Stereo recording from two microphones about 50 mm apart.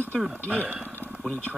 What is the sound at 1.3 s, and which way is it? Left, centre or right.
Speech, left.